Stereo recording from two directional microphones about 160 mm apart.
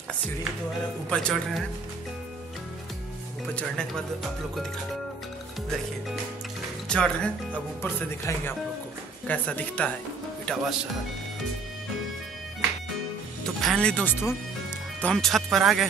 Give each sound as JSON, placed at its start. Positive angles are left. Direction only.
{"t": 1.1, "sound": "speech", "side_deg": 5}
{"t": 3.5, "sound": "speech", "side_deg": 5}
{"t": 6.9, "sound": "speech", "side_deg": 5}
{"t": 13.6, "sound": "speech", "side_deg": 5}